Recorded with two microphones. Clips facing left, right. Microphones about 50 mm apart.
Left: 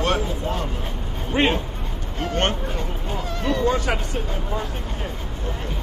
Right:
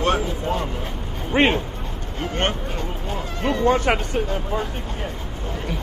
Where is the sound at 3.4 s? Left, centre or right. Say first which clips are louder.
Right 3 dB; right.